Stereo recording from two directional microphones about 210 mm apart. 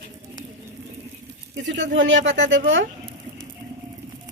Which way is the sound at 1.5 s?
60° right (ahead or behind).